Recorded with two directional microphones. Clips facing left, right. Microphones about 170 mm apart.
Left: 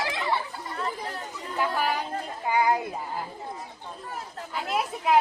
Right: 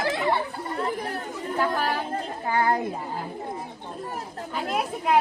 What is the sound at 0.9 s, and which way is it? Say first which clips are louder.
Chatter: right 5 dB; 60° right (ahead or behind).